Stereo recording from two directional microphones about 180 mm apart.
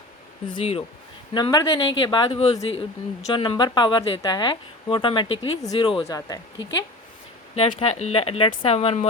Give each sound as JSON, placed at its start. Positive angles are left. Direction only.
{"t": 0.4, "sound": "a woman's voice", "side_deg": 30}
{"t": 7.5, "sound": "speech", "side_deg": 30}